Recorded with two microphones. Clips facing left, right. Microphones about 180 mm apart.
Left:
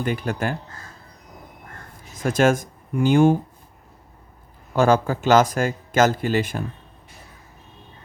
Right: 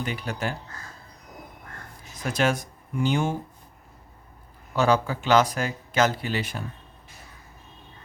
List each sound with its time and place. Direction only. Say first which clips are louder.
0.0 s speech: left 5 dB; 50° left (ahead or behind)
2.2 s speech: left 6 dB; 45° left (ahead or behind)
4.7 s speech: left 4 dB; 50° left (ahead or behind)